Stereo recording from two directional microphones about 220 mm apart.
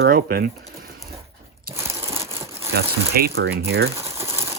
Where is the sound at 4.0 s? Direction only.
15° right (ahead or behind).